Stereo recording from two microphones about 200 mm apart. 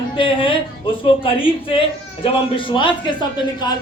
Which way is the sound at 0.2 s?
25° left (ahead or behind).